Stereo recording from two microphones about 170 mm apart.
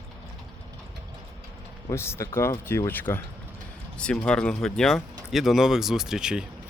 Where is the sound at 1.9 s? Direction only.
15° left (ahead or behind).